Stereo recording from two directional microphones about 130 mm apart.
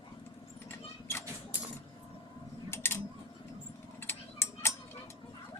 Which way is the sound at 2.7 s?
20° left (ahead or behind).